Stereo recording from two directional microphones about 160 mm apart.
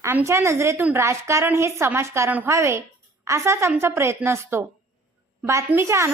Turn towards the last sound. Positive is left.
turn(degrees=-15)  # may be behind; listen again after turning